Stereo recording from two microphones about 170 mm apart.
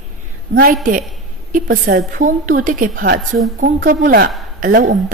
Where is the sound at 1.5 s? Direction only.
60° right (ahead or behind).